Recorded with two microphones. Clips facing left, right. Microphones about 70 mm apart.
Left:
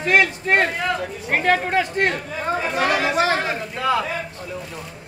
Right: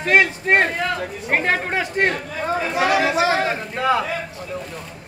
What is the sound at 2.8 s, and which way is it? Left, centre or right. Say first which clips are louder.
Speech: right 2 dB; left.